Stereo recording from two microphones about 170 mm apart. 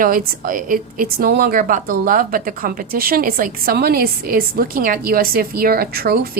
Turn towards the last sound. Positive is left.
turn(degrees=-60)  # may be behind; listen again after turning